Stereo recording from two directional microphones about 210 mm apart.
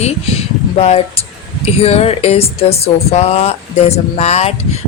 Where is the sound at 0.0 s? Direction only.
30° left (ahead or behind).